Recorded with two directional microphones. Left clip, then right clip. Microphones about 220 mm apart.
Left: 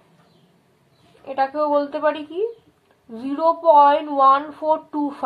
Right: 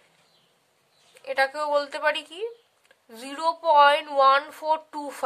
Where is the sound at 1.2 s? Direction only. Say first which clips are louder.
Left 4 dB; 40° right (ahead or behind).